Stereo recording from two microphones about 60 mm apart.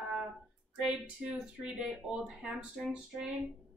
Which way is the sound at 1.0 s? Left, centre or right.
Right.